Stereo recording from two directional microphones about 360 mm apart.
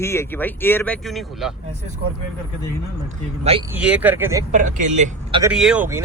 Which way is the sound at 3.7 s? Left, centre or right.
Centre.